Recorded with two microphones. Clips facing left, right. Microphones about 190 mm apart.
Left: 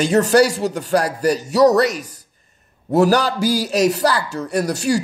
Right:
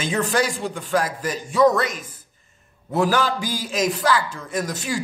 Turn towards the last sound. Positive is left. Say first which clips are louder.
# left 6 dB
turn(degrees=40)  # may be behind; listen again after turning